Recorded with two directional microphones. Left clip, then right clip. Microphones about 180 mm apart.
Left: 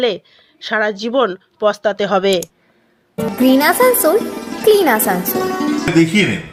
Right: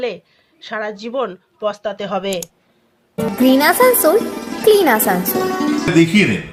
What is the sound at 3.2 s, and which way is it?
Speech, centre (ahead or behind).